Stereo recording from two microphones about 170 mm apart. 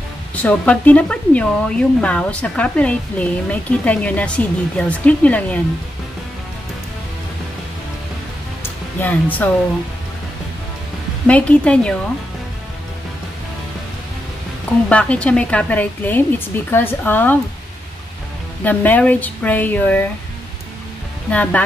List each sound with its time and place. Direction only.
0.4 s speech: 10° left (ahead or behind)
8.6 s music: 10° left (ahead or behind)
11.2 s speech: 5° left (ahead or behind)
14.9 s speech: 5° left (ahead or behind)
18.6 s speech: 10° left (ahead or behind)
21.3 s speech: 10° left (ahead or behind)